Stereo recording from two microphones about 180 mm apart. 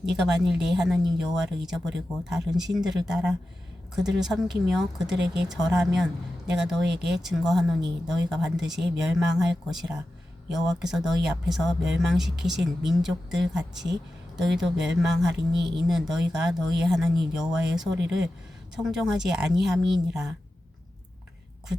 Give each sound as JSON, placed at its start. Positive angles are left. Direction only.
{"t": 0.2, "sound": "speech", "side_deg": 0}